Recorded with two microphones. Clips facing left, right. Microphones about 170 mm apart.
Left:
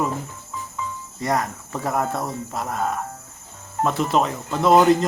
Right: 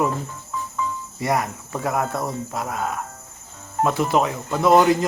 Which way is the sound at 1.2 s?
5° right (ahead or behind).